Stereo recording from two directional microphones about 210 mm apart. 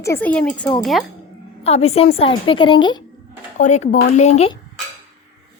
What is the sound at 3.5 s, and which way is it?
Speech, 35° left (ahead or behind).